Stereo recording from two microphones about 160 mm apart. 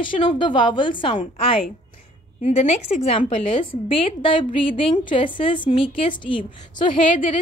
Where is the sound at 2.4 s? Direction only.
45° left (ahead or behind).